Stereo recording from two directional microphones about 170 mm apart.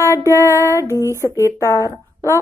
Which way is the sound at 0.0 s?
20° left (ahead or behind).